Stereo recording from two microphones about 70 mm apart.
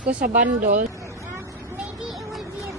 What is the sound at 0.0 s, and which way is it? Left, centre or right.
Speech, centre.